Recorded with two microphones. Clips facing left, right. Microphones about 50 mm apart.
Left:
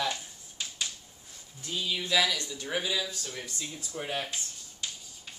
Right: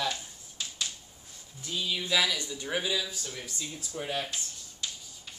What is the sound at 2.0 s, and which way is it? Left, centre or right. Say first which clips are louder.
Speech: left 1 dB; centre.